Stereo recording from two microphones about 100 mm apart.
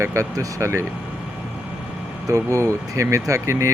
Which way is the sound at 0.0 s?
30° right (ahead or behind).